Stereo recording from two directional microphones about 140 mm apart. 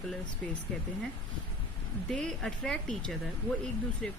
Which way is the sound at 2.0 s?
5° left (ahead or behind).